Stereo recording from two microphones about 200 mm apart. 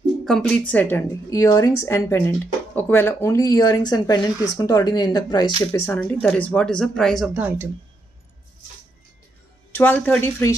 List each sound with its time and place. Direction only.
0.2 s a woman's voice: 5° left (ahead or behind); by 5.5 s 20° left (ahead or behind)
5.7 s a woman's voice: 10° left (ahead or behind)
7.3 s speech: 10° right (ahead or behind)
9.7 s a woman's voice: 10° left (ahead or behind)